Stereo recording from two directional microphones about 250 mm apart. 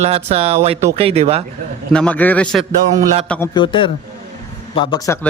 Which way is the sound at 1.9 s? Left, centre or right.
Centre.